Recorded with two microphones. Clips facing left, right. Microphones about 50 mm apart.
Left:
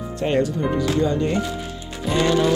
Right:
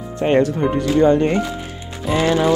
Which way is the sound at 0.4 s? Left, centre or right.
Right.